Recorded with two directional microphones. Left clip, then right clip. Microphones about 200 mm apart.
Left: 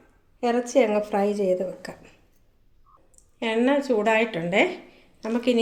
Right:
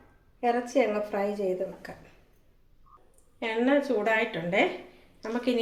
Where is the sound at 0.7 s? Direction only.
50° left (ahead or behind).